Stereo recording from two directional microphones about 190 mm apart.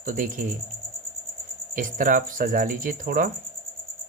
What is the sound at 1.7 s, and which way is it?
Speech, 45° right (ahead or behind).